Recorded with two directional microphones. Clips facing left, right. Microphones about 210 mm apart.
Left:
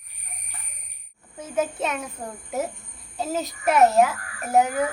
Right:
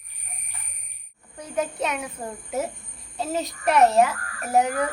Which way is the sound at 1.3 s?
5° left (ahead or behind).